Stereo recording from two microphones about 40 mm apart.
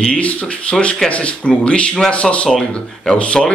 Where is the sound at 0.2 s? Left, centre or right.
Left.